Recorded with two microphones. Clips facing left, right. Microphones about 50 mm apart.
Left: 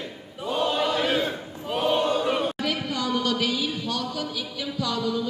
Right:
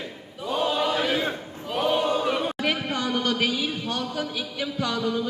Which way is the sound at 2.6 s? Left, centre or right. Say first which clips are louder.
Right 1 dB; right.